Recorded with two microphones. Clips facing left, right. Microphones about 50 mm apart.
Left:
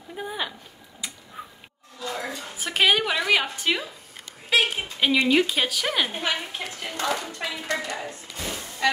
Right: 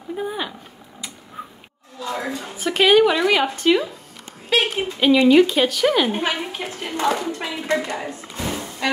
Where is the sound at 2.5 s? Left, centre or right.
Centre.